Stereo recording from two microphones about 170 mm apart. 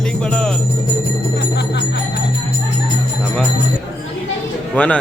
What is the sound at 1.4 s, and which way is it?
Jingle bell, 90° left.